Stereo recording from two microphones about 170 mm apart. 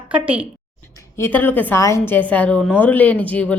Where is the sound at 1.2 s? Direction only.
10° left (ahead or behind).